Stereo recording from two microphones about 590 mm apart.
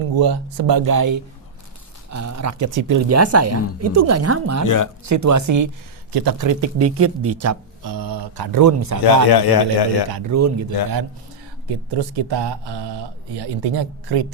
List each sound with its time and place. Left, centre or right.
0.2 s speech: right
4.6 s a man's voice: left
5.0 s speech: right
9.3 s a man's voice: left
10.1 s speech: right
11.7 s speech: right